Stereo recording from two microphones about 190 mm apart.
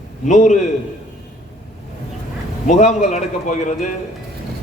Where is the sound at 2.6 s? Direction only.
40° left (ahead or behind).